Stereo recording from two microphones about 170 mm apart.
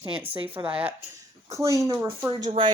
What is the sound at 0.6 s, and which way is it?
Speech, 10° right (ahead or behind).